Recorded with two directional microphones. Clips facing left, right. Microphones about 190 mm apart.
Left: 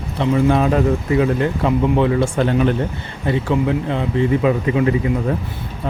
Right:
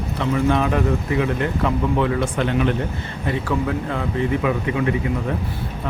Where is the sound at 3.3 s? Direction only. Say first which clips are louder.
Left 5 dB; 25° left (ahead or behind).